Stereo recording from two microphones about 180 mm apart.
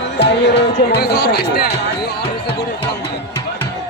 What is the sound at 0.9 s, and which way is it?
Speech, 60° left (ahead or behind).